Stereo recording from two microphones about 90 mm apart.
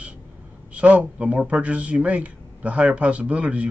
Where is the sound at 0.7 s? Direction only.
15° right (ahead or behind).